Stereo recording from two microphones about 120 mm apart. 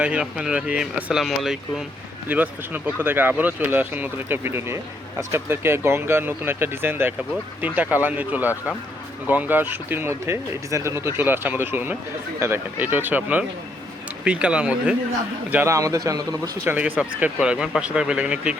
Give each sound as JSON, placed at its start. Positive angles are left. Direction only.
{"t": 0.0, "sound": "speech", "side_deg": -10}
{"t": 2.3, "sound": "speech", "side_deg": -15}
{"t": 15.7, "sound": "a man's voice", "side_deg": -25}
{"t": 16.6, "sound": "speech", "side_deg": -15}